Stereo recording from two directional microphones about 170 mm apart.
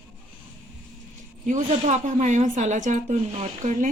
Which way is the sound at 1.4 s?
45° right (ahead or behind).